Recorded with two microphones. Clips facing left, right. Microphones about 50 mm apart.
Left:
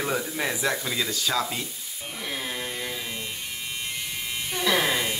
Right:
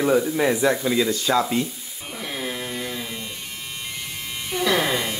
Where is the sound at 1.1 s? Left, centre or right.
Right.